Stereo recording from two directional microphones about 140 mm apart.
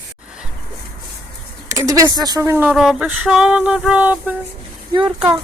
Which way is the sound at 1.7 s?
25° right (ahead or behind).